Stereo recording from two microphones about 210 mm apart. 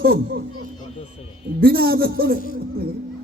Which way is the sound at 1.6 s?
45° right (ahead or behind).